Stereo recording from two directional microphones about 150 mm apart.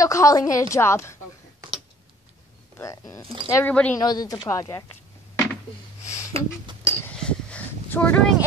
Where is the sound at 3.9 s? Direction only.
25° left (ahead or behind).